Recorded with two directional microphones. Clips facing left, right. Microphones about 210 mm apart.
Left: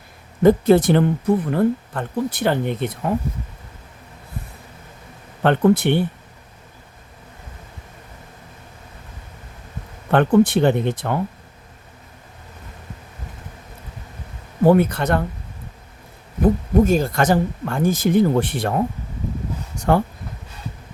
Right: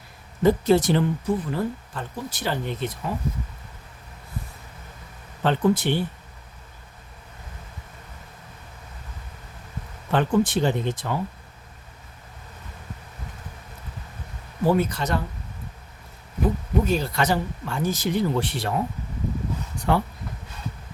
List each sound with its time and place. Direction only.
0.4 s speech: 55° left (ahead or behind)
5.4 s speech: 60° left (ahead or behind)
10.1 s speech: 60° left (ahead or behind)
14.6 s speech: 60° left (ahead or behind)
16.4 s speech: 50° left (ahead or behind)
19.7 s a sound: 45° left (ahead or behind)